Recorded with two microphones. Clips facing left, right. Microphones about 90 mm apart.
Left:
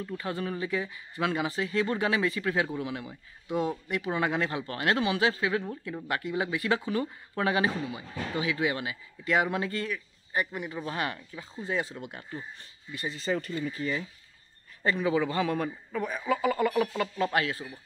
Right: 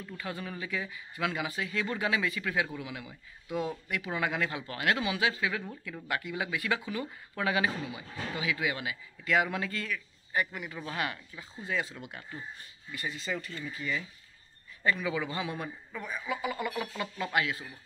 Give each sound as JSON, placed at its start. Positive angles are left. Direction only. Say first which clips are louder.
{"t": 0.0, "sound": "a man's voice", "louder": "left 6 dB", "side_deg": 35}